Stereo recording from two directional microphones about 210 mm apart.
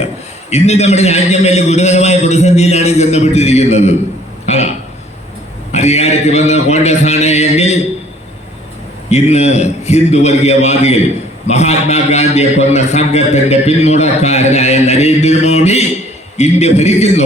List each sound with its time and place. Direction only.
0.5 s a man's voice: 30° left (ahead or behind)
5.7 s a sound: 30° left (ahead or behind)
9.0 s a man's voice: 30° left (ahead or behind)